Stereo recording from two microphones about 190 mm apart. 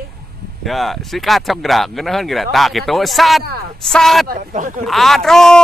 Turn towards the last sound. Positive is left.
turn(degrees=0)  # may be behind; listen again after turning